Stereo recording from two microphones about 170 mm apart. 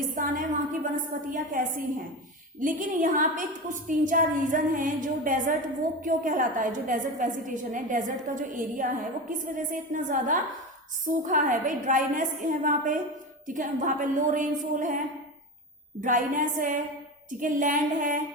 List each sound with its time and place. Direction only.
0.2 s a woman's voice: 50° right (ahead or behind)